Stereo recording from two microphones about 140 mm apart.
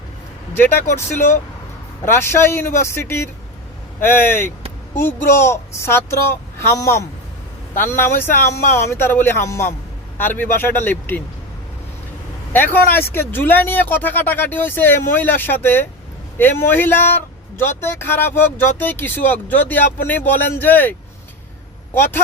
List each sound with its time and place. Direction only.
0.9 s speech: 20° left (ahead or behind)
12.5 s speech: 15° left (ahead or behind)